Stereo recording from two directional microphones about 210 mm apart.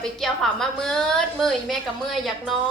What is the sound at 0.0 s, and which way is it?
A woman's voice, centre (ahead or behind).